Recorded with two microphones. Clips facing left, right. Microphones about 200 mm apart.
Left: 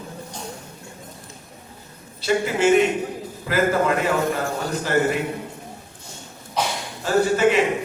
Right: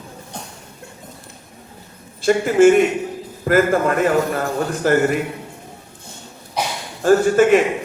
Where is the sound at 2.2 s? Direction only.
50° right (ahead or behind).